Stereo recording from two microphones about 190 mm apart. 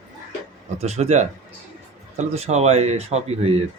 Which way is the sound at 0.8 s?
35° right (ahead or behind).